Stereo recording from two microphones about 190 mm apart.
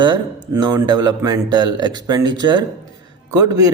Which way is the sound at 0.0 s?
20° right (ahead or behind).